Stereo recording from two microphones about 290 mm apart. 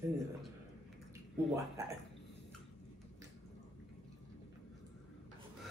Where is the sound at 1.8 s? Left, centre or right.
Centre.